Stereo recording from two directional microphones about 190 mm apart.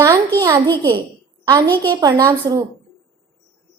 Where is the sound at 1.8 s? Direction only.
20° right (ahead or behind).